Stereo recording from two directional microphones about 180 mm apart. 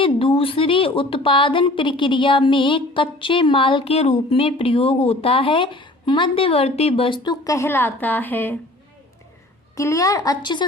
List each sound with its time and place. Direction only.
0.0 s a woman's voice: 30° left (ahead or behind); by 8.5 s 10° left (ahead or behind)
9.7 s a woman's voice: 20° left (ahead or behind)